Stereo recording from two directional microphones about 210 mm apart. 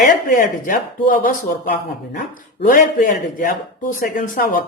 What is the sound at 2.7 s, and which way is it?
Speech, 40° left (ahead or behind).